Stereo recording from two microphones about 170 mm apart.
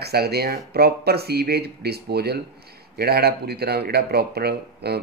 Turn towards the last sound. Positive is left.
turn(degrees=-70)  # may be behind; listen again after turning